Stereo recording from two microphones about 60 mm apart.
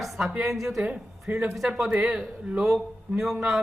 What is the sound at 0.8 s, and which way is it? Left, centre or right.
Speech, right.